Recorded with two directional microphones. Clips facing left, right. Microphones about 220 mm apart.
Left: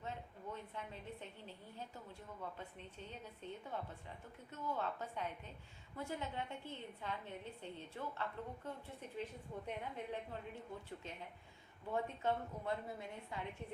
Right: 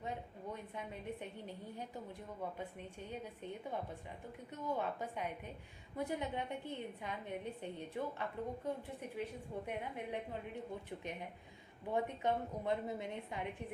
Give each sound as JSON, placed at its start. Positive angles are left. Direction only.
{"t": 0.0, "sound": "a woman's voice", "side_deg": -15}